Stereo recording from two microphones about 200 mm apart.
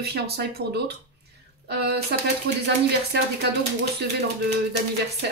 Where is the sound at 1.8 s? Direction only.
55° right (ahead or behind).